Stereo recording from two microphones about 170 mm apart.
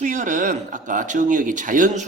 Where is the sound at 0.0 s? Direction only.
45° right (ahead or behind).